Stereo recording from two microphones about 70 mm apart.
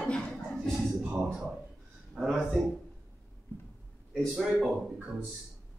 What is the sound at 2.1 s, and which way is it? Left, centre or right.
Speech, centre.